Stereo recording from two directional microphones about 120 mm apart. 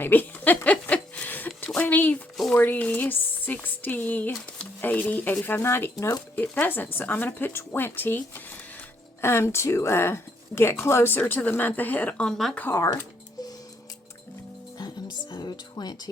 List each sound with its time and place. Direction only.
0.0 s a sound: 15° left (ahead or behind)
2.5 s speech: 15° left (ahead or behind)
12.5 s speech: 20° left (ahead or behind)
14.8 s music: 35° left (ahead or behind)